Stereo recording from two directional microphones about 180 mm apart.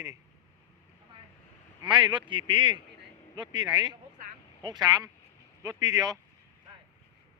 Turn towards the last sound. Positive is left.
turn(degrees=-20)  # may be behind; listen again after turning